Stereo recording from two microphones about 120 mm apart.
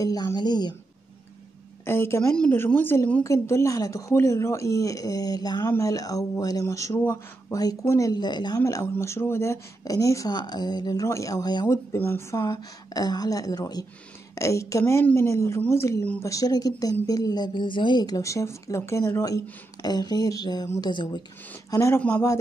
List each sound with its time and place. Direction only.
0.0 s a woman's voice: 30° left (ahead or behind)
1.9 s speech: 20° left (ahead or behind)
3.3 s speech: 25° left (ahead or behind)
7.0 s speech: 15° left (ahead or behind)
8.1 s speech: 35° left (ahead or behind)
21.6 s speech: 25° left (ahead or behind)